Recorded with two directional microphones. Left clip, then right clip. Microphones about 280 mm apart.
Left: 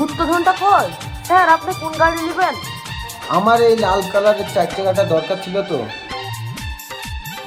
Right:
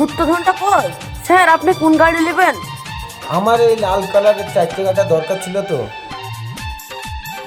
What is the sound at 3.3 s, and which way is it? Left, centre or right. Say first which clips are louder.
Speech: even; right.